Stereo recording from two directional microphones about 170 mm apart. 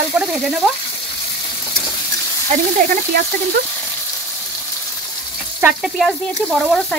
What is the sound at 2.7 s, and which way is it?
Sizzle, 55° right (ahead or behind).